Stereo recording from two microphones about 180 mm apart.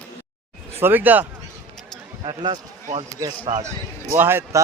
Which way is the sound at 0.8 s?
10° right (ahead or behind).